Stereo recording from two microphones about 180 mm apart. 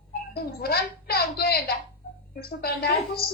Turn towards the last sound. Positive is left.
turn(degrees=60)  # may be behind; listen again after turning